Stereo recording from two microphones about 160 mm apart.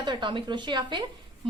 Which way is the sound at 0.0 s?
30° right (ahead or behind).